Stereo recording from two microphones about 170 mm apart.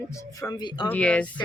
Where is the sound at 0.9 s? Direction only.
5° left (ahead or behind).